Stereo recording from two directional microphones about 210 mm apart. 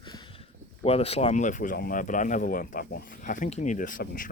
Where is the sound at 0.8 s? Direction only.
30° left (ahead or behind).